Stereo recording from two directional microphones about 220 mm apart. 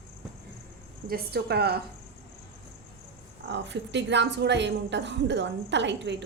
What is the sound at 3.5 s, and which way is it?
A woman's voice, 55° right (ahead or behind).